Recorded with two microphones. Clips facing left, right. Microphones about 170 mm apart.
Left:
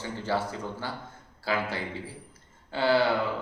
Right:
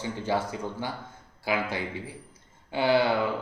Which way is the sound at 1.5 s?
15° right (ahead or behind).